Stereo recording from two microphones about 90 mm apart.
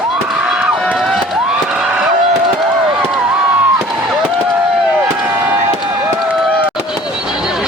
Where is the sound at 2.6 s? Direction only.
Centre (ahead or behind).